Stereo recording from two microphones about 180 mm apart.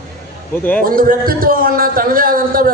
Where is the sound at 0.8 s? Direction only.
55° right (ahead or behind).